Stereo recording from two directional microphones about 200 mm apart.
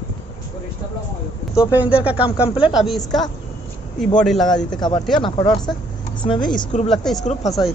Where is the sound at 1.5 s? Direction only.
5° right (ahead or behind).